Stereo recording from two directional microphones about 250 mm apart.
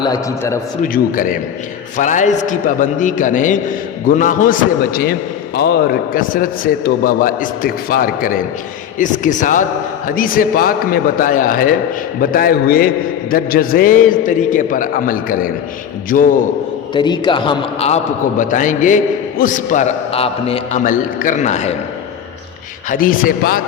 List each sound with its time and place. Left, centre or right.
0.0 s a man's voice: centre
0.8 s a man's voice: left
16.9 s a man's voice: centre
22.9 s a man's voice: left